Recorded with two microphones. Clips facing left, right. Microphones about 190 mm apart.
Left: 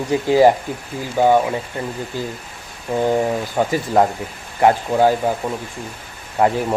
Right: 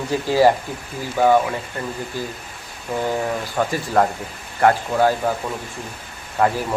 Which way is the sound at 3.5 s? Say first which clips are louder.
Left 2 dB; 15° left (ahead or behind).